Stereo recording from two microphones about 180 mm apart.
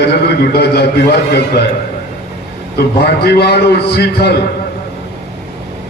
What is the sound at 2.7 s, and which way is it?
A man's voice, 60° left (ahead or behind).